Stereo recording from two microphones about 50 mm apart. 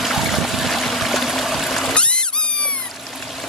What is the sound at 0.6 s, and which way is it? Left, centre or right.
Stream, centre.